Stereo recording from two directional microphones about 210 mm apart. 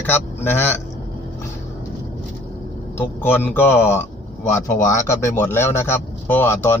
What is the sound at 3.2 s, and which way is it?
A man's voice, 10° left (ahead or behind).